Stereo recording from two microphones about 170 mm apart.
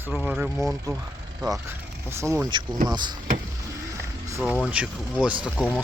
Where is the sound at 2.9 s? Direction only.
25° right (ahead or behind).